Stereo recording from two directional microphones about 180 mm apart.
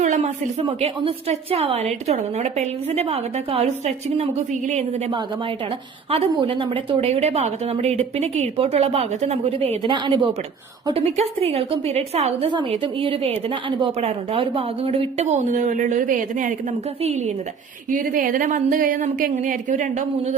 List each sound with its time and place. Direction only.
0.0 s a sound: 40° right (ahead or behind)
0.8 s a woman's voice: 30° right (ahead or behind)
17.0 s a woman's voice: 35° right (ahead or behind)
17.9 s speech: 50° right (ahead or behind)